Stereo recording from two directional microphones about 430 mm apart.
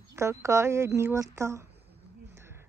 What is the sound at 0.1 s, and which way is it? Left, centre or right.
Speech, centre.